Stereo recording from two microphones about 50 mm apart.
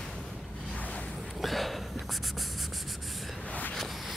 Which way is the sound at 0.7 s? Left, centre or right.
Left.